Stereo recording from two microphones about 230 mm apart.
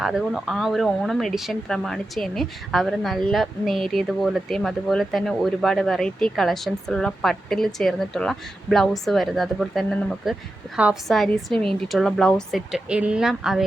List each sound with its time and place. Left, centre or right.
0.0 s speech: centre